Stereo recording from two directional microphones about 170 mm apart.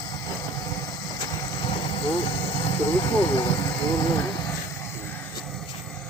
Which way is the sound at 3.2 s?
30° left (ahead or behind).